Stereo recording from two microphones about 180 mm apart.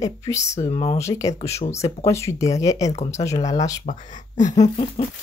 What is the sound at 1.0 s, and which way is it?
Speech, 15° left (ahead or behind).